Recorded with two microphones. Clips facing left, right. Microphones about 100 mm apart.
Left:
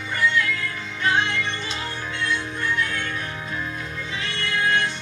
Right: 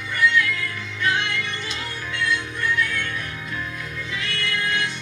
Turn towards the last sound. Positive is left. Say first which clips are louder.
# left 3 dB
turn(degrees=30)  # may be behind; listen again after turning